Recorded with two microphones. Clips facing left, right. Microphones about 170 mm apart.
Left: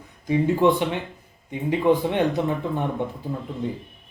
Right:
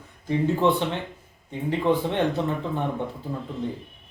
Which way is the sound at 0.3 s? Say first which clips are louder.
Left 3 dB; 15° left (ahead or behind).